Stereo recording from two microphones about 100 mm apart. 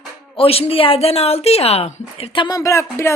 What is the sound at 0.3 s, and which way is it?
Speech, 75° left (ahead or behind).